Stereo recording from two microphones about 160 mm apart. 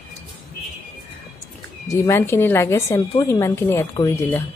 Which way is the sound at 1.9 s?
15° left (ahead or behind).